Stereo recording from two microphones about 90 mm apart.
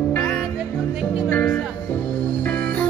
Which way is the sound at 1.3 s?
25° left (ahead or behind).